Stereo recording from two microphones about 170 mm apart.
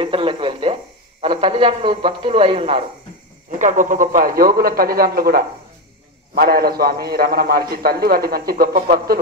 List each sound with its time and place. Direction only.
0.0 s speech: 30° right (ahead or behind)
3.5 s a man's voice: 50° right (ahead or behind)